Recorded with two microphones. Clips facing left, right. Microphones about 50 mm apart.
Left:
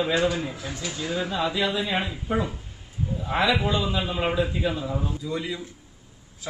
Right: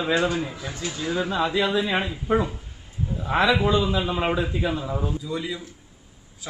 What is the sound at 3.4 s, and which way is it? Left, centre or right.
Speech, right.